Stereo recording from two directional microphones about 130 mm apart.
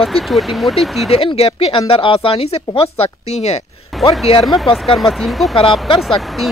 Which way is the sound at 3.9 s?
Centre (ahead or behind).